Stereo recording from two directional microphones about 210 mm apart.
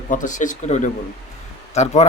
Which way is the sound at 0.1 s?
35° left (ahead or behind).